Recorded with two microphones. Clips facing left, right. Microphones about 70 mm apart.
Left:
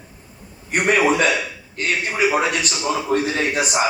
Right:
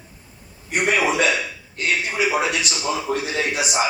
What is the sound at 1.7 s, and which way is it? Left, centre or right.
A man's voice, left.